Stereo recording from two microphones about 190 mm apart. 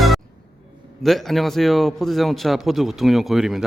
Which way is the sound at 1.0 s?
Centre (ahead or behind).